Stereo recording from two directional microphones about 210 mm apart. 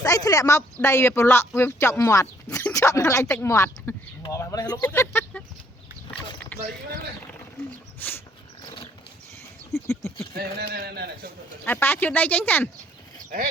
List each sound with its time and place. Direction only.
0.0 s speech: 15° left (ahead or behind)
7.9 s wild animals: 10° left (ahead or behind)
9.7 s speech: 15° left (ahead or behind)
10.3 s a man's voice: 45° right (ahead or behind)
11.6 s speech: 10° left (ahead or behind)